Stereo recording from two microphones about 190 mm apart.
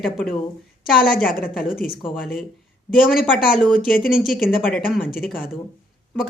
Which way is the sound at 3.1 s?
Centre (ahead or behind).